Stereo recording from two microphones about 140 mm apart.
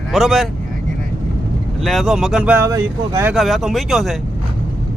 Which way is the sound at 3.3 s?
Centre (ahead or behind).